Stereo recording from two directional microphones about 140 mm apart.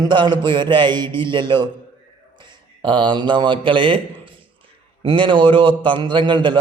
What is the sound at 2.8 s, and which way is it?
A man's voice, 35° right (ahead or behind).